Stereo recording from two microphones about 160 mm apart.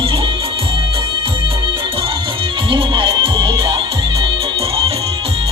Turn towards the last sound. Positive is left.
turn(degrees=-35)  # may be behind; listen again after turning